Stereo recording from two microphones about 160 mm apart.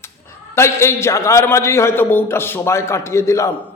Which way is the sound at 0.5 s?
15° left (ahead or behind).